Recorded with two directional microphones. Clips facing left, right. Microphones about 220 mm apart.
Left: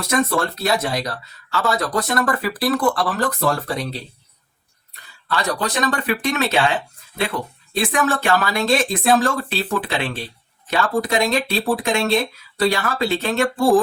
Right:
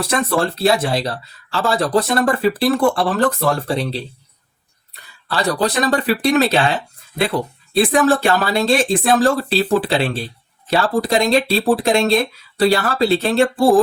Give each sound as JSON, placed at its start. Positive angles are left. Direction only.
{"t": 0.0, "sound": "speech", "side_deg": -30}
{"t": 5.3, "sound": "speech", "side_deg": -30}